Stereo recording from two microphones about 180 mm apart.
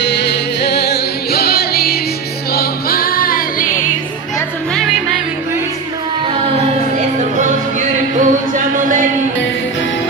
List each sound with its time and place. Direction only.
0.0 s music: 75° left (ahead or behind); by 3.8 s 50° left (ahead or behind)
7.2 s music: 40° right (ahead or behind)